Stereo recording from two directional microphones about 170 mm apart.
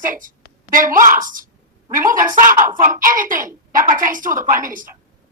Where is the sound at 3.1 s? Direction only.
50° right (ahead or behind).